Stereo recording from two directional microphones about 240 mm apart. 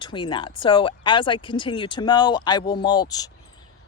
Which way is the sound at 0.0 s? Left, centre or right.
Centre.